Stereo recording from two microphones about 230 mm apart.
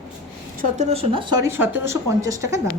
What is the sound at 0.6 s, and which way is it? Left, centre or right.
A woman's voice, right.